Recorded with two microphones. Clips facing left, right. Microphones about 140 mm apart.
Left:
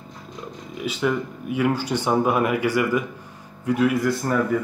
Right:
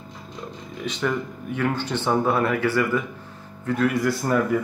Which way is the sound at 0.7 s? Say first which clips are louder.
Left 2 dB; 5° left (ahead or behind).